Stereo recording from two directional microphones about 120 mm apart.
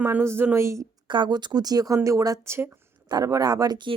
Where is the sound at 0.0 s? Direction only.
20° right (ahead or behind).